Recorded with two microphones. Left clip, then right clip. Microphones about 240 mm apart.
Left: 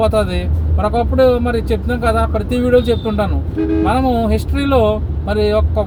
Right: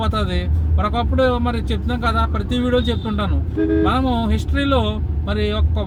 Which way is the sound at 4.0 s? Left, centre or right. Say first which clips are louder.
Left 5 dB; centre.